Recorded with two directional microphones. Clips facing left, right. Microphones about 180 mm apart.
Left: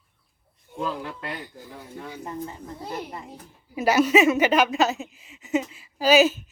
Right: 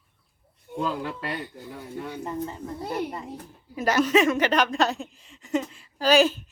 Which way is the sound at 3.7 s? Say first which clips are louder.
Left 2 dB; 10° left (ahead or behind).